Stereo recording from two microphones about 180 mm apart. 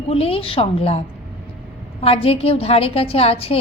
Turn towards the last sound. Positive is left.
turn(degrees=30)  # may be behind; listen again after turning